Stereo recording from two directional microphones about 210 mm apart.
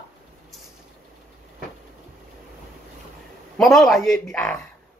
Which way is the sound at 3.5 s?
Centre (ahead or behind).